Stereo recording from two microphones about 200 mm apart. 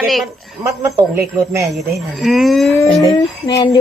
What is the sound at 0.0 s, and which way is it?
Speech, centre (ahead or behind).